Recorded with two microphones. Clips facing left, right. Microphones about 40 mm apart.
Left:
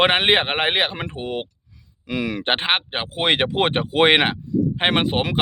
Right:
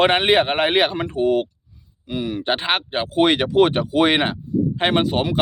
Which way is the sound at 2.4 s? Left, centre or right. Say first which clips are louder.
Even; left.